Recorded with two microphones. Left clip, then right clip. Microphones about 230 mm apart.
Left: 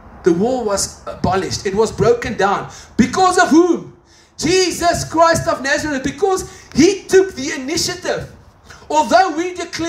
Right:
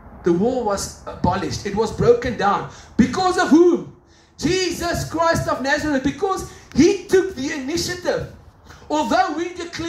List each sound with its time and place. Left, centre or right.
0.2 s a man's voice: left